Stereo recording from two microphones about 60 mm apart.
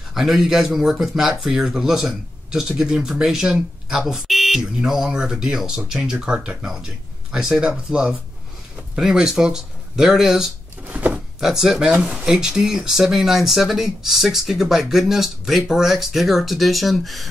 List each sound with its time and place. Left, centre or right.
0.1 s speech: centre
10.9 s a sound: right
11.3 s speech: centre